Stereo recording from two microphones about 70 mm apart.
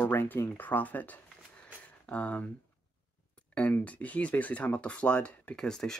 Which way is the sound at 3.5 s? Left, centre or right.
Centre.